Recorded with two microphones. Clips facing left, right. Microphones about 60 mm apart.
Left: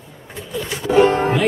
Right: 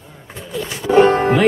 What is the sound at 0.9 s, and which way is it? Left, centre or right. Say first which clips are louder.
Music: right 2 dB; right.